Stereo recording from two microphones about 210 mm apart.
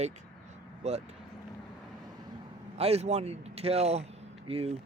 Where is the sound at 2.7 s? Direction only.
30° right (ahead or behind).